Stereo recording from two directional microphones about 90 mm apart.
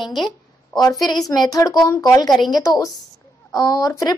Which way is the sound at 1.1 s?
45° left (ahead or behind).